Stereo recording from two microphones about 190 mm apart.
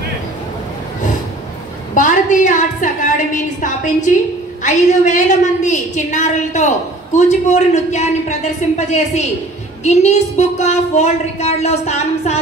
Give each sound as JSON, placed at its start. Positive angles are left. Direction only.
{"t": 2.0, "sound": "a woman's voice", "side_deg": 40}